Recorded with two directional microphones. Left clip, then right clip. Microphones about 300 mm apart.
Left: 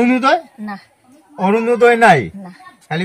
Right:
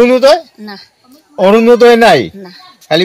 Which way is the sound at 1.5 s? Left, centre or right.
Right.